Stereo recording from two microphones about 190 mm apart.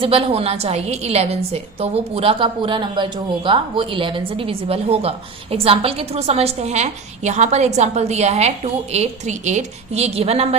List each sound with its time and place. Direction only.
0.0 s a woman's voice: 30° right (ahead or behind)